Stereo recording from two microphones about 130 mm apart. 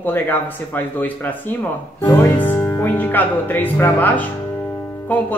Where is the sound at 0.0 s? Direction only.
15° left (ahead or behind).